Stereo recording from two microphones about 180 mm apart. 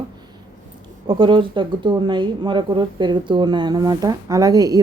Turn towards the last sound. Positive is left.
turn(degrees=-20)  # may be behind; listen again after turning